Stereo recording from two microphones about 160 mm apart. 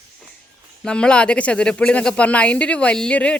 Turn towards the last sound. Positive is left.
turn(degrees=5)  # may be behind; listen again after turning